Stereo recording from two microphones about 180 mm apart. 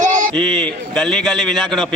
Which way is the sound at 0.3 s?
5° left (ahead or behind).